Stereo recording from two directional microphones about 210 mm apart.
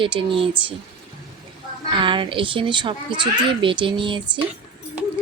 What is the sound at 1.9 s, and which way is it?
A woman's voice, 25° right (ahead or behind).